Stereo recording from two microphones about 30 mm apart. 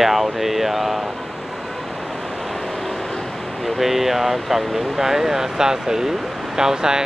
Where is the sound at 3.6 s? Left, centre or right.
Centre; by 7.0 s right.